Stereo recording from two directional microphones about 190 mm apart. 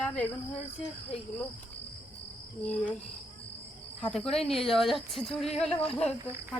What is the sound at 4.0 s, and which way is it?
Speech, 5° left (ahead or behind).